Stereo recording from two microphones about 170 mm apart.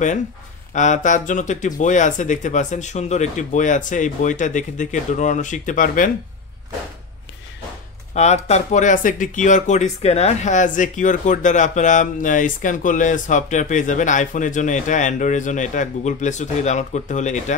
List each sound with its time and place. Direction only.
0.7 s speech: 45° left (ahead or behind)
8.1 s speech: 40° left (ahead or behind)